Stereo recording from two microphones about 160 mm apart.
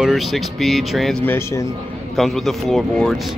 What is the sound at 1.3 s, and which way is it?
Speech, 15° left (ahead or behind).